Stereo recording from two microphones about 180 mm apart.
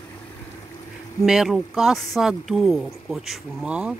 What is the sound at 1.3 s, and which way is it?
Speech, centre (ahead or behind).